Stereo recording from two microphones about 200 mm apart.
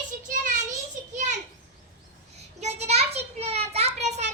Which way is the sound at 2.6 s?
30° right (ahead or behind).